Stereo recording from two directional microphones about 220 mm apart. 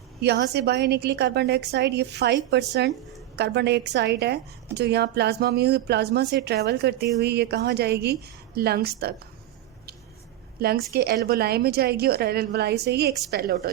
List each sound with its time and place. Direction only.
0.2 s a woman's voice: 50° right (ahead or behind)
10.6 s a woman's voice: 45° right (ahead or behind)